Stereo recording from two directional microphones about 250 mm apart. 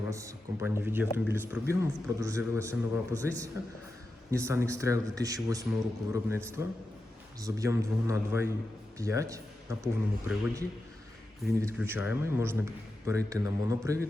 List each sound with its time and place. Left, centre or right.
0.1 s a man's voice: centre
11.6 s a man's voice: centre